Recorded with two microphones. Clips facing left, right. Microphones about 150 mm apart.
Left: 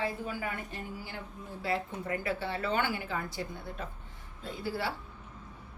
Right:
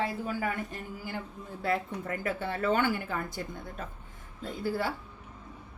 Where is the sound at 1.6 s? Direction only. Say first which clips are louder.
Right 3 dB; 55° right (ahead or behind).